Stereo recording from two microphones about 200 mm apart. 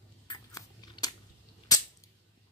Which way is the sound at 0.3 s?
20° left (ahead or behind).